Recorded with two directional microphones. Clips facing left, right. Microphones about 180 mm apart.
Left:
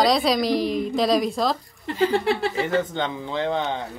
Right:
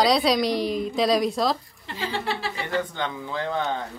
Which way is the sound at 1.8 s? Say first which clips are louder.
Left 8 dB; 50° left (ahead or behind).